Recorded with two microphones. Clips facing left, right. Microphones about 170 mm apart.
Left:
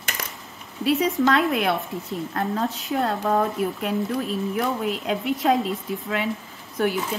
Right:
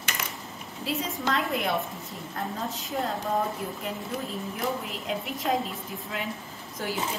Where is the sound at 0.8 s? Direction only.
70° left (ahead or behind).